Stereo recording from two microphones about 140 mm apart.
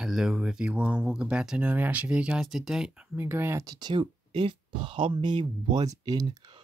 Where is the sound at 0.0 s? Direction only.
5° right (ahead or behind).